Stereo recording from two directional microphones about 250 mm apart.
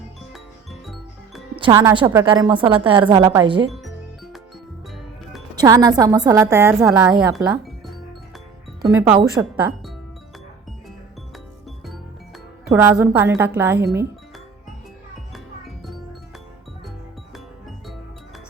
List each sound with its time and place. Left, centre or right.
0.3 s music: centre
1.5 s a woman's voice: centre
3.7 s music: centre
5.5 s a woman's voice: centre
7.3 s music: centre
8.8 s a woman's voice: centre
12.7 s a woman's voice: centre
17.3 s music: centre